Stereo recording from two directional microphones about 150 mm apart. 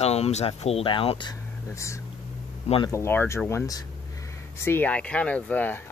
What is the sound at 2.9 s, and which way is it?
Speech, 15° left (ahead or behind).